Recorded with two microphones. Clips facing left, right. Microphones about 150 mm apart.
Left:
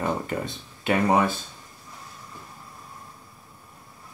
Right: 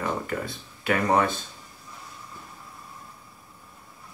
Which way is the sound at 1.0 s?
10° left (ahead or behind).